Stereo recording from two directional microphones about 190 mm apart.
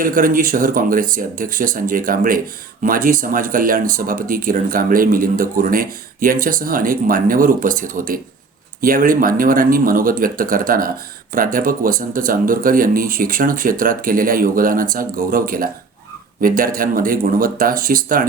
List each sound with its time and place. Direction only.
0.0 s speech: 45° right (ahead or behind)